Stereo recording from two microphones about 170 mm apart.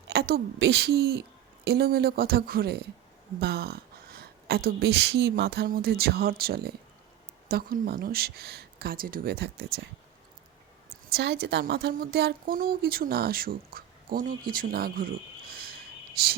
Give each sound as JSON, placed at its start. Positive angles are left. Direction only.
{"t": 0.1, "sound": "a woman's voice", "side_deg": -65}
{"t": 11.1, "sound": "a woman's voice", "side_deg": -75}